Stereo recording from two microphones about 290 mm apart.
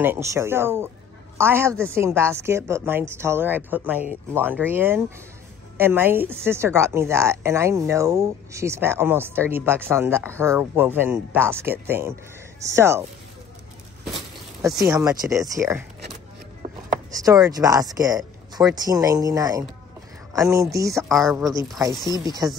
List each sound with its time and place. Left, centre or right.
0.0 s a woman's voice: centre
14.9 s a woman's voice: centre
16.6 s a sound: right
17.2 s a woman's voice: centre